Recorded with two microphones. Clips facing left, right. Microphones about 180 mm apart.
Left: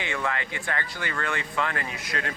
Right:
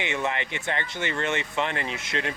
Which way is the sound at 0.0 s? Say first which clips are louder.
Right 2 dB; 20° right (ahead or behind).